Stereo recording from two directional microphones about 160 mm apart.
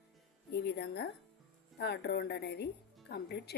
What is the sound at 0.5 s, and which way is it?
A woman's voice, 90° left.